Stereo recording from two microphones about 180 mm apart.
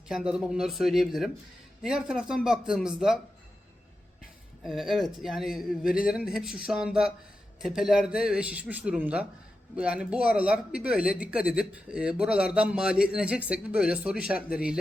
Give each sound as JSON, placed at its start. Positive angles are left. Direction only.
{"t": 0.1, "sound": "speech", "side_deg": -5}
{"t": 4.6, "sound": "speech", "side_deg": 0}